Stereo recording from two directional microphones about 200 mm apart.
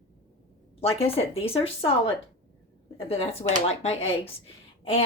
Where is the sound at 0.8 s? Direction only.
30° left (ahead or behind).